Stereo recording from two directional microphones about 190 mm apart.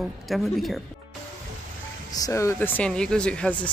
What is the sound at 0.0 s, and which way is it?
Speech, centre (ahead or behind).